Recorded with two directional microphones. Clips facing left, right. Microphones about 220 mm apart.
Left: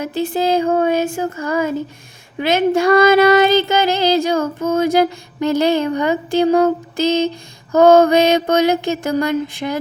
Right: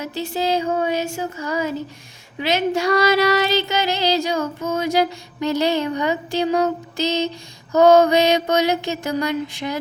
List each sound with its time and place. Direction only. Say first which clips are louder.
0.0 s female singing: left 5 dB; 50° left (ahead or behind)